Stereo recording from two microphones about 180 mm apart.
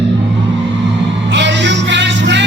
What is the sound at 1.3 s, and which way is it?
Music, 75° right (ahead or behind).